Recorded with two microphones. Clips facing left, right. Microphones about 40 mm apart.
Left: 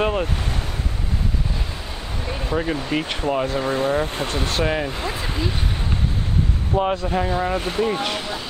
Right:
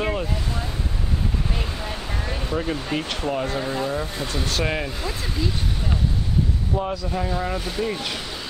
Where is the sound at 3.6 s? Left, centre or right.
Left.